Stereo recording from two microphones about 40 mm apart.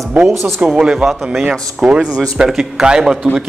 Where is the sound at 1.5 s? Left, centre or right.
Right.